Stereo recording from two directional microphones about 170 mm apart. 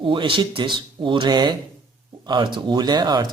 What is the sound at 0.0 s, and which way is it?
Speech, 30° right (ahead or behind).